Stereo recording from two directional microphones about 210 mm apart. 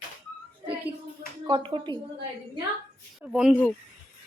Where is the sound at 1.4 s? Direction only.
25° right (ahead or behind).